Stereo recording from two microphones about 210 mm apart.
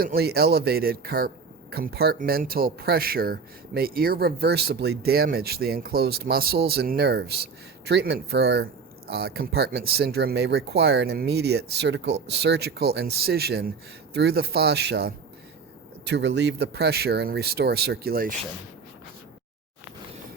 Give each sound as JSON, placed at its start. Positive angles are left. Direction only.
{"t": 0.0, "sound": "speech", "side_deg": -45}